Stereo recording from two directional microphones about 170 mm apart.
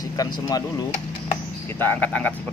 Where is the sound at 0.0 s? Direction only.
20° left (ahead or behind).